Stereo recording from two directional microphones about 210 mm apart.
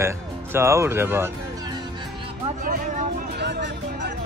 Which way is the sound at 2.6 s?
40° right (ahead or behind).